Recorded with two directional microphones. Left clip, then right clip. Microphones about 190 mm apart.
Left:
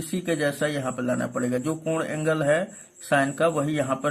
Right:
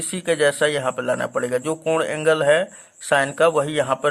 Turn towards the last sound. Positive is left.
turn(degrees=-40)  # may be behind; listen again after turning